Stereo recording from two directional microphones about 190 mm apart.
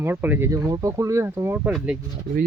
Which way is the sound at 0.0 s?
10° right (ahead or behind).